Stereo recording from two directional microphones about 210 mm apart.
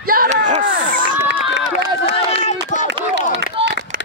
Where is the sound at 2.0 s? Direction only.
30° left (ahead or behind).